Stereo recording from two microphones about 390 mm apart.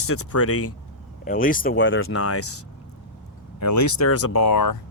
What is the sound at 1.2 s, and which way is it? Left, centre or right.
Speech, left.